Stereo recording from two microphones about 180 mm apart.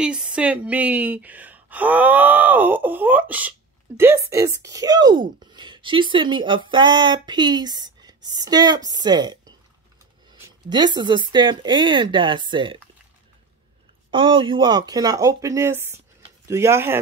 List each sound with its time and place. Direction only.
0.0 s a woman's voice: 5° right (ahead or behind); by 9.4 s 25° right (ahead or behind)
10.4 s speech: 25° right (ahead or behind)
14.1 s a woman's voice: 30° right (ahead or behind)